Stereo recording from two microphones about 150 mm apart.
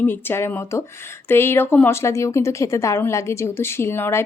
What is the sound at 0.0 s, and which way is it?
A woman's voice, 15° left (ahead or behind).